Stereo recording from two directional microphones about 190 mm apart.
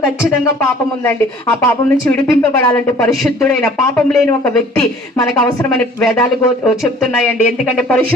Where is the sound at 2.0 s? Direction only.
15° left (ahead or behind).